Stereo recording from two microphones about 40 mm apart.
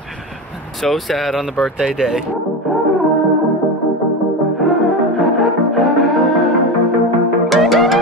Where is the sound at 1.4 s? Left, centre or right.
Right.